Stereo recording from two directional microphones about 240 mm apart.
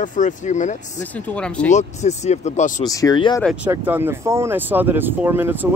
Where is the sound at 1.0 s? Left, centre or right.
Centre.